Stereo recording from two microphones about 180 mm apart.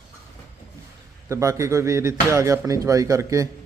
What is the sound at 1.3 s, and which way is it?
Speech, 15° right (ahead or behind).